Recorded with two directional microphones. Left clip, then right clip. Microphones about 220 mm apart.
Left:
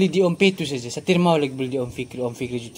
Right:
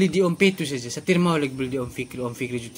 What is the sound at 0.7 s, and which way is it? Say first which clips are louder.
Speech: left 1 dB; 10° right (ahead or behind).